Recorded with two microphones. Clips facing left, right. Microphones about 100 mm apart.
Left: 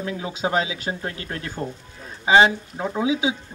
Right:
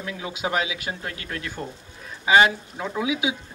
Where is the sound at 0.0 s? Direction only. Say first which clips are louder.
Left 3 dB; 30° left (ahead or behind).